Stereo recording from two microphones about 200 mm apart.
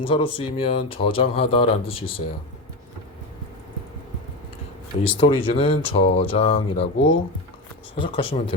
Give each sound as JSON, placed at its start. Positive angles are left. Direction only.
{"t": 0.0, "sound": "speech", "side_deg": 25}
{"t": 5.1, "sound": "speech", "side_deg": 25}